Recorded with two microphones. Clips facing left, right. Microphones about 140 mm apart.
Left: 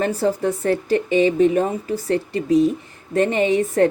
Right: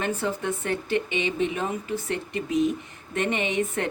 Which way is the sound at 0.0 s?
35° left (ahead or behind).